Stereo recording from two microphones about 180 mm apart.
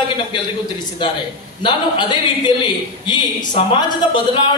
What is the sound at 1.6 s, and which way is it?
A man's voice, 25° left (ahead or behind).